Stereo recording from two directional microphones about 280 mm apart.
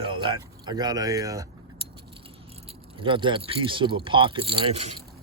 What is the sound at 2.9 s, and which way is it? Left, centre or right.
Speech, centre.